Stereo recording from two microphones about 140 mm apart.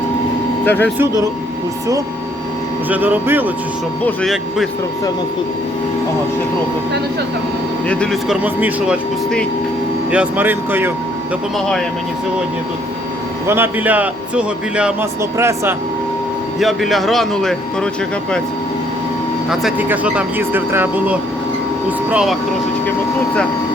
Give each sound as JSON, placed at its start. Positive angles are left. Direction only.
{"t": 0.6, "sound": "speech", "side_deg": 15}
{"t": 2.9, "sound": "a man's voice", "side_deg": -10}
{"t": 4.0, "sound": "speech", "side_deg": 0}
{"t": 7.9, "sound": "speech", "side_deg": 5}
{"t": 8.4, "sound": "a man's voice", "side_deg": -10}
{"t": 10.1, "sound": "a man's voice", "side_deg": -10}
{"t": 13.5, "sound": "a man's voice", "side_deg": -15}
{"t": 15.2, "sound": "speech", "side_deg": -20}
{"t": 16.6, "sound": "speech", "side_deg": 0}
{"t": 19.9, "sound": "a man's voice", "side_deg": -10}